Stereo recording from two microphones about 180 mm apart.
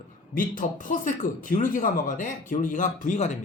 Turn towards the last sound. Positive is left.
turn(degrees=40)  # may be behind; listen again after turning